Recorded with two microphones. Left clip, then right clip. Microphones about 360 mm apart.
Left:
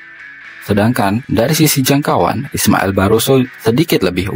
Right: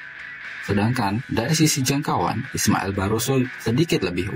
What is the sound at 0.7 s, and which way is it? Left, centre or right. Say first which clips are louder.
Speech: left 10 dB; left.